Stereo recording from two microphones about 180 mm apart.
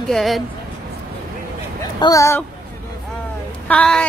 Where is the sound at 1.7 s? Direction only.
20° left (ahead or behind).